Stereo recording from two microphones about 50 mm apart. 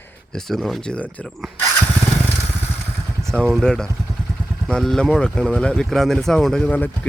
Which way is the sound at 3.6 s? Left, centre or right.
Centre.